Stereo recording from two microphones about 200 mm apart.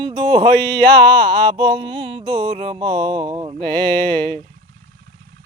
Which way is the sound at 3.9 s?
5° left (ahead or behind).